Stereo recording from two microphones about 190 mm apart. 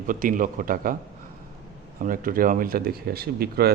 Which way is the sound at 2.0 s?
45° right (ahead or behind).